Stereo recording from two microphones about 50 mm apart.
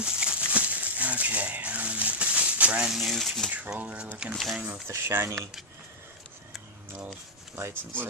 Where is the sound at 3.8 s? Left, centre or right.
Right.